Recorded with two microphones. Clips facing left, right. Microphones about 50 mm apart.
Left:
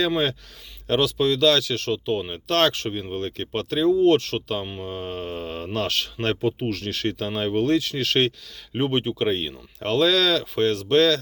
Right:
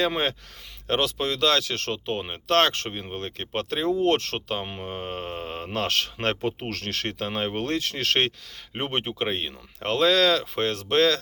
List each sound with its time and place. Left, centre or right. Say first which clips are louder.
0.9 s speech: left 4 dB; right
3.8 s speech: left 6 dB; right
4.4 s speech: left 2 dB; right
6.1 s speech: left 3 dB; right
7.6 s speech: left 5 dB; right
9.8 s speech: left 1 dB; right